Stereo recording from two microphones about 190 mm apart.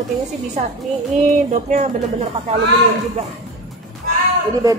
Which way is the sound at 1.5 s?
40° right (ahead or behind).